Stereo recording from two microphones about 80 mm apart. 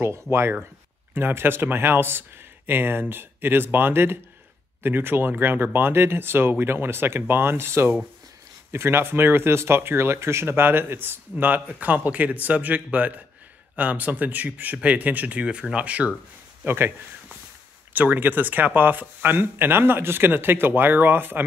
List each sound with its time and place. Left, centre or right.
0.0 s speech: right
16.6 s speech: right
17.9 s speech: right